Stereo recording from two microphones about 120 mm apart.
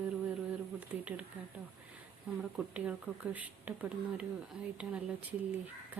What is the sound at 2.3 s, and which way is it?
Speech, 5° right (ahead or behind).